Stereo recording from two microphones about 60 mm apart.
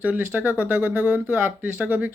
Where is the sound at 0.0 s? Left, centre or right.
Right.